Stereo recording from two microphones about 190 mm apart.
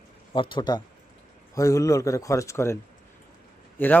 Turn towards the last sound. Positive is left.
turn(degrees=10)  # may be behind; listen again after turning